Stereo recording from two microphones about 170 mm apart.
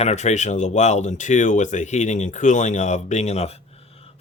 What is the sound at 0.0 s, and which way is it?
Speech, 40° left (ahead or behind).